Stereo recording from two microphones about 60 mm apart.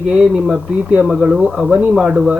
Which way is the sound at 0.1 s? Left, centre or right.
Centre.